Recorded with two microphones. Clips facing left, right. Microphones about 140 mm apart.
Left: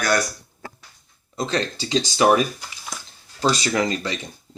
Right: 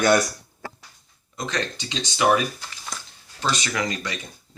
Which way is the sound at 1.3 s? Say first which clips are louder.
Left 4 dB; 30° left (ahead or behind).